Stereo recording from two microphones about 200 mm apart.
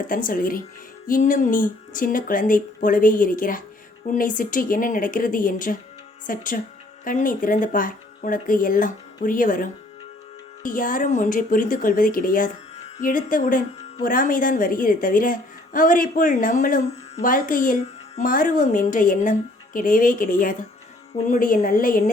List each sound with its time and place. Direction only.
0.1 s a woman's voice: 45° left (ahead or behind)